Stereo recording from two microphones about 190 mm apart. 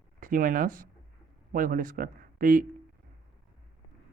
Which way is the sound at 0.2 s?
45° right (ahead or behind).